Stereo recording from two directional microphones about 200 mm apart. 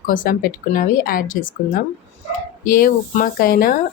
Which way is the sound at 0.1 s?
45° left (ahead or behind).